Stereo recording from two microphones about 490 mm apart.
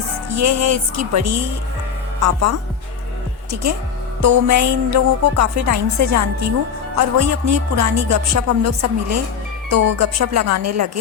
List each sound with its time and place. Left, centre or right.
0.3 s speech: right